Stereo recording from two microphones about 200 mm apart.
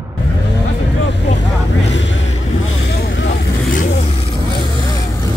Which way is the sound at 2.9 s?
55° left (ahead or behind).